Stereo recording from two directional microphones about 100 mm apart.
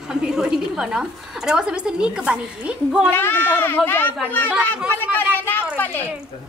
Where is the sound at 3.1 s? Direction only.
20° left (ahead or behind).